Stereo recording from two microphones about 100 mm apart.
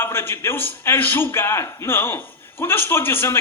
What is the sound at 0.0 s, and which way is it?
A man's voice, 25° left (ahead or behind).